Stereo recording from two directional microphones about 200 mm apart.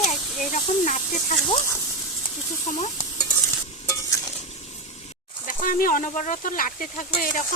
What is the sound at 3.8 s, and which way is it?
Stir, 15° left (ahead or behind).